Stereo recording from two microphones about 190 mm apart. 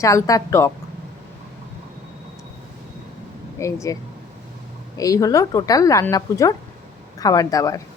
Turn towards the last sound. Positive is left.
turn(degrees=20)  # may be behind; listen again after turning